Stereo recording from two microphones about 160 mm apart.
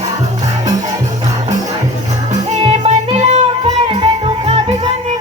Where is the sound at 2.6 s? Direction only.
45° right (ahead or behind).